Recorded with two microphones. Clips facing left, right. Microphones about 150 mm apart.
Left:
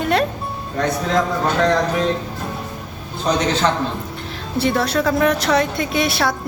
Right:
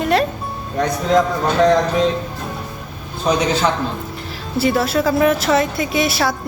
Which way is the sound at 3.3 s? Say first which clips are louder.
Right 2 dB; 10° right (ahead or behind).